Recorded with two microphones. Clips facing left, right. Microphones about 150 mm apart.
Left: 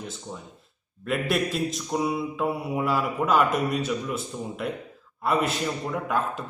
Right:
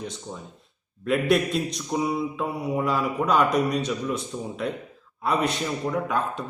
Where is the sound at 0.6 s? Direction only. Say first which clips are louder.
Right 5 dB; centre (ahead or behind).